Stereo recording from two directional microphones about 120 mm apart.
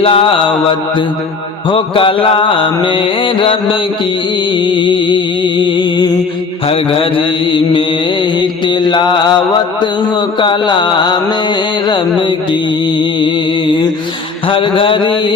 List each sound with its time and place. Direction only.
0.0 s mantra: 50° left (ahead or behind)
1.7 s mantra: 45° left (ahead or behind)
4.5 s music: 40° left (ahead or behind)
6.7 s mantra: 50° left (ahead or behind)
13.0 s music: 40° left (ahead or behind)
14.4 s mantra: 45° left (ahead or behind)